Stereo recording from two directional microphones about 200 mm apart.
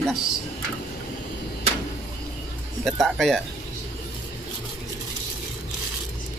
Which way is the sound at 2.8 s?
Centre (ahead or behind).